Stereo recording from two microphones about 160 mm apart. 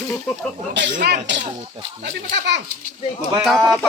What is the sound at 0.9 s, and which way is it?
Speech, 75° right (ahead or behind).